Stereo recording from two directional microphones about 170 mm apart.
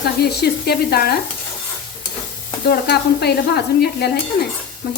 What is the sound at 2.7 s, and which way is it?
Sizzle, 70° left (ahead or behind).